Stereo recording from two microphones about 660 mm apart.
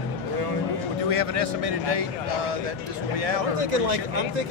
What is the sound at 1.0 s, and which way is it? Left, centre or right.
Speech, right.